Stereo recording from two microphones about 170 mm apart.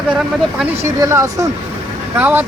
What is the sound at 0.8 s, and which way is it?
Speech, 15° right (ahead or behind).